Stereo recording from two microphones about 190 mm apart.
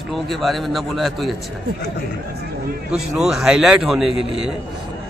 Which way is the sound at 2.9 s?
5° right (ahead or behind).